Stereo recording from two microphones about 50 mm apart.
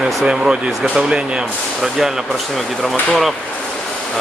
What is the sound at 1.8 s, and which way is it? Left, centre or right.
Speech, centre.